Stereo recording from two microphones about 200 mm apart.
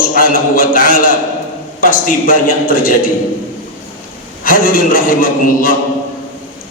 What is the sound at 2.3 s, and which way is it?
Speech, 45° left (ahead or behind).